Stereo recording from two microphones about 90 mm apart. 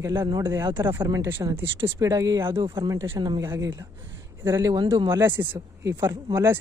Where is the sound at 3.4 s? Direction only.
30° right (ahead or behind).